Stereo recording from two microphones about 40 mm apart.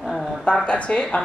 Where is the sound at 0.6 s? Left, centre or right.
Left.